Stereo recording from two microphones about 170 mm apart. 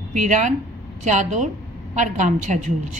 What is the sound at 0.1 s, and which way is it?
A woman's voice, 45° right (ahead or behind).